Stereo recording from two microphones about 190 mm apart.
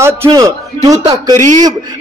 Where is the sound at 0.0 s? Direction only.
15° right (ahead or behind).